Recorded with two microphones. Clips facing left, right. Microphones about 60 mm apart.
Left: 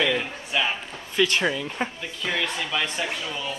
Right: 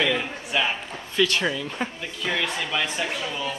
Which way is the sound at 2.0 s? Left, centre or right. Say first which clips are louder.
Right 1 dB; centre.